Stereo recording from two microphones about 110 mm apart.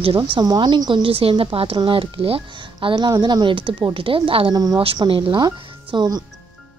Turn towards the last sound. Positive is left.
turn(degrees=-40)  # may be behind; listen again after turning